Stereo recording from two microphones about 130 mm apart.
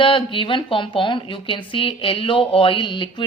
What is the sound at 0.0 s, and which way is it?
A woman's voice, 40° left (ahead or behind).